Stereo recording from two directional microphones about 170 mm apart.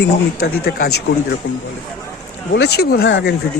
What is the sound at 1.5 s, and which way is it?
Speech, 90° left.